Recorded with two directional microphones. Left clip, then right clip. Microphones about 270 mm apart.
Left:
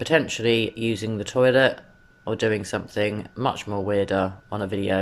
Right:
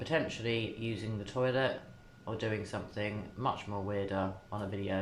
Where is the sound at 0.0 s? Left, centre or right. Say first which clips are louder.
Left 12 dB; left.